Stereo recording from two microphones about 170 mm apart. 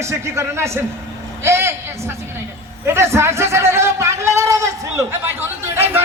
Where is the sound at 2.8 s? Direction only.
15° right (ahead or behind).